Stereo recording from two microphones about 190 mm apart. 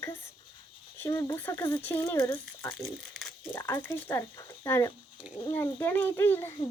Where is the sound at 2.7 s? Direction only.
Centre (ahead or behind).